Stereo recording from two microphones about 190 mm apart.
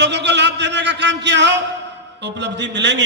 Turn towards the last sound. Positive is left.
turn(degrees=-70)  # may be behind; listen again after turning